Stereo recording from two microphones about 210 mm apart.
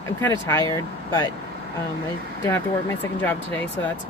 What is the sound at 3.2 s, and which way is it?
Speech, 5° left (ahead or behind).